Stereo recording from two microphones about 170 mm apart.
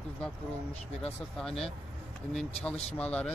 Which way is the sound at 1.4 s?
5° left (ahead or behind).